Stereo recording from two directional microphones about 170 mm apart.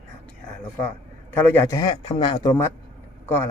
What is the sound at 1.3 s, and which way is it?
A man's voice, 15° left (ahead or behind).